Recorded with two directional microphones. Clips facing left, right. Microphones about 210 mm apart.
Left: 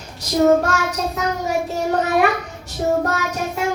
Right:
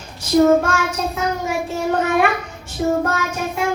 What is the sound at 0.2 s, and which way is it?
Child singing, 40° left (ahead or behind).